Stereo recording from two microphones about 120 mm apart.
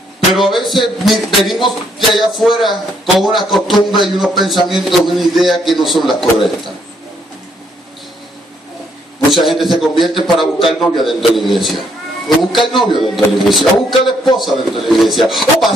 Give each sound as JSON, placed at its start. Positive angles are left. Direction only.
{"t": 0.3, "sound": "music", "side_deg": 0}
{"t": 9.3, "sound": "music", "side_deg": 0}
{"t": 13.0, "sound": "music", "side_deg": 0}
{"t": 14.0, "sound": "a man's voice", "side_deg": 40}
{"t": 14.4, "sound": "music", "side_deg": 0}